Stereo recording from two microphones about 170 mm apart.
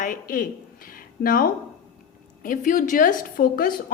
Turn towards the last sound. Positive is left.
turn(degrees=55)  # may be behind; listen again after turning